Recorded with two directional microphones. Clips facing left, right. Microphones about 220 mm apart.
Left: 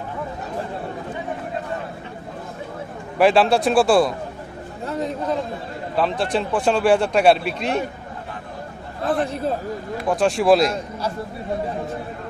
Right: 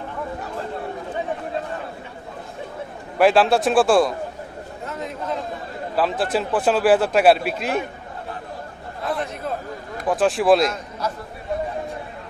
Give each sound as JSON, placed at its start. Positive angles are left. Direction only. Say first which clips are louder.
{"t": 3.2, "sound": "speech", "louder": "even", "side_deg": 0}
{"t": 4.8, "sound": "a sound", "louder": "left 6 dB", "side_deg": 35}
{"t": 5.9, "sound": "speech", "louder": "even", "side_deg": 0}
{"t": 9.0, "sound": "a man's voice", "louder": "left 4 dB", "side_deg": 30}
{"t": 10.0, "sound": "speech", "louder": "even", "side_deg": 0}